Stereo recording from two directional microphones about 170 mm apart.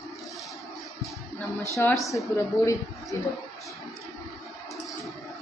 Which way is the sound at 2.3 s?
15° left (ahead or behind).